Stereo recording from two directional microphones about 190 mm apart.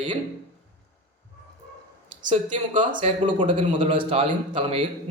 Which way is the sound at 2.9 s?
25° right (ahead or behind).